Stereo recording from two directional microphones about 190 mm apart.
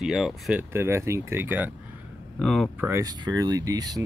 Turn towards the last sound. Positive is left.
turn(degrees=-20)  # may be behind; listen again after turning